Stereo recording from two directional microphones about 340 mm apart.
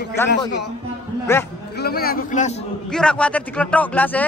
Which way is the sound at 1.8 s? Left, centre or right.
Left.